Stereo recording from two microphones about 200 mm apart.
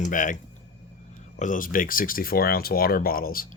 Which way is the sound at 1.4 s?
40° left (ahead or behind).